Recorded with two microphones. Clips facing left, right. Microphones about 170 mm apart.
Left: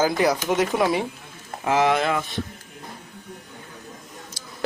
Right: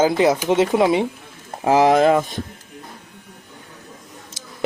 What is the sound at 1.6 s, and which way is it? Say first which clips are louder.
Speech: right 6 dB; 35° right (ahead or behind).